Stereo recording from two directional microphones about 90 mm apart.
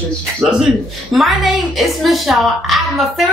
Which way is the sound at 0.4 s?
5° right (ahead or behind).